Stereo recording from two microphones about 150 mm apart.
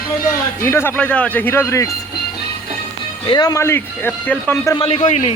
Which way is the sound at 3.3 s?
25° left (ahead or behind).